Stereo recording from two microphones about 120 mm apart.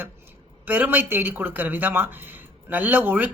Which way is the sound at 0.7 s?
15° right (ahead or behind).